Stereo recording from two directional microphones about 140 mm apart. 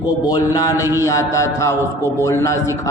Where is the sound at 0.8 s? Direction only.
20° right (ahead or behind).